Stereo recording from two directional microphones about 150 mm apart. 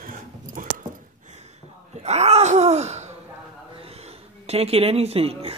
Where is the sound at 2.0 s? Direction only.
45° right (ahead or behind).